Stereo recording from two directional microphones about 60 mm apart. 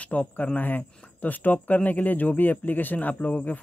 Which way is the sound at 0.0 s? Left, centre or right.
Left.